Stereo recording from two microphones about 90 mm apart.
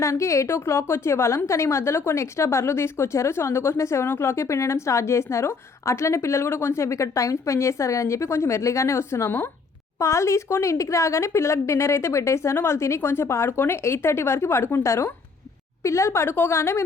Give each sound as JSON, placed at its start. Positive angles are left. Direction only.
{"t": 0.0, "sound": "a woman's voice", "side_deg": 35}